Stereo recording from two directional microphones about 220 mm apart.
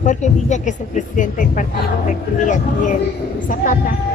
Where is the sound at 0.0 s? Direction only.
35° left (ahead or behind).